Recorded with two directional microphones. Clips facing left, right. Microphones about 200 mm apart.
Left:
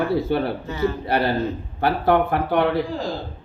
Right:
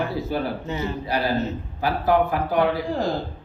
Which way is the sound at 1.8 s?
60° left (ahead or behind).